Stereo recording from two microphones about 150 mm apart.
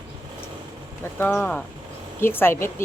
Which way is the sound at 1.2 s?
15° left (ahead or behind).